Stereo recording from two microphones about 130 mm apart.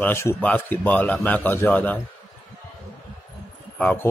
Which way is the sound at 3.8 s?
15° left (ahead or behind).